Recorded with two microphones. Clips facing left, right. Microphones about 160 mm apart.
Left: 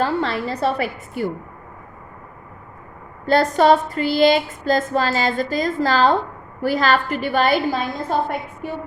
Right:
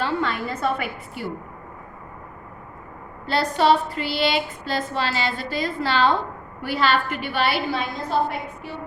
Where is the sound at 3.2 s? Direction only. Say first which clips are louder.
Left 5 dB; 45° left (ahead or behind).